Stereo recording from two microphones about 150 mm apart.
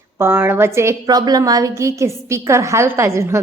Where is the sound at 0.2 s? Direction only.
15° right (ahead or behind).